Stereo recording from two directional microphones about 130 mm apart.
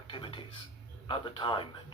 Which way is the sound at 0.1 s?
40° left (ahead or behind).